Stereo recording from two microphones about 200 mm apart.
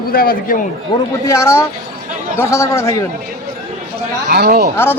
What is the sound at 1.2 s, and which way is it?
Speech, 15° left (ahead or behind).